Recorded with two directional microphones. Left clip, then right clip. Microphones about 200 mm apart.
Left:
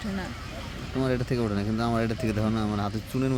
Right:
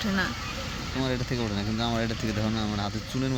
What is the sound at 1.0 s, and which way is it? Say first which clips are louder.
Speech: left 3 dB; 45° left (ahead or behind).